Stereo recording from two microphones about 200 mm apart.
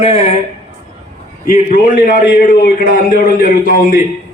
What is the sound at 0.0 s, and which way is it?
Speech, 30° left (ahead or behind).